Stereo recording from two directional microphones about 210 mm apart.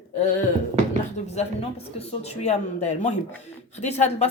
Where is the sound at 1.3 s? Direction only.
30° left (ahead or behind).